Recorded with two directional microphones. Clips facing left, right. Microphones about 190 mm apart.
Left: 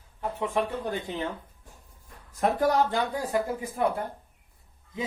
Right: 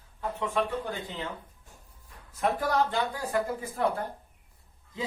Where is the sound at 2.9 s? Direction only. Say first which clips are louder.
Left 2 dB; 15° left (ahead or behind).